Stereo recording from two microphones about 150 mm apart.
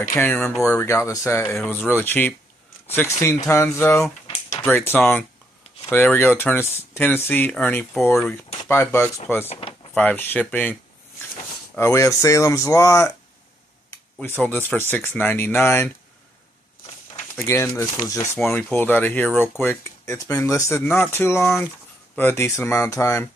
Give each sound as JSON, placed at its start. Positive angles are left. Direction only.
{"t": 0.1, "sound": "speech", "side_deg": 10}
{"t": 8.6, "sound": "speech", "side_deg": 15}
{"t": 9.5, "sound": "speech", "side_deg": 35}
{"t": 9.9, "sound": "speech", "side_deg": 10}
{"t": 14.2, "sound": "speech", "side_deg": 15}
{"t": 17.4, "sound": "speech", "side_deg": 15}